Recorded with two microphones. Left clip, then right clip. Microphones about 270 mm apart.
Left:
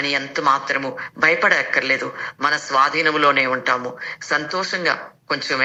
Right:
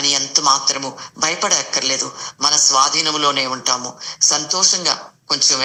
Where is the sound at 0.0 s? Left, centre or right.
Centre.